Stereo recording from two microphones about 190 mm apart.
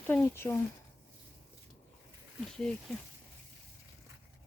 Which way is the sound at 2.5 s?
5° left (ahead or behind).